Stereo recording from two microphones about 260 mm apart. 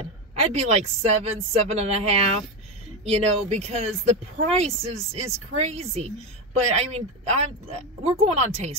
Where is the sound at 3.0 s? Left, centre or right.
Right.